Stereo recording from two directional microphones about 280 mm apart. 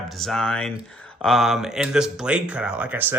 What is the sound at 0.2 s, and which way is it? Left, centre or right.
Speech, centre.